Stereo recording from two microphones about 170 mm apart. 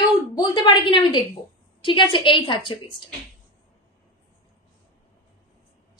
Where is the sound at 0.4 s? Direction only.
30° left (ahead or behind).